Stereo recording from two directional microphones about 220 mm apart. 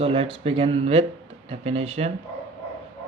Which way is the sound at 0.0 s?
25° right (ahead or behind).